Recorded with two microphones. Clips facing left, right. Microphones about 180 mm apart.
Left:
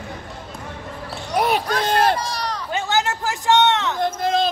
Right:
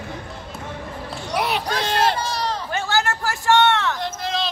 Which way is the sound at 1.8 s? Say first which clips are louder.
Left 1 dB; 50° left (ahead or behind).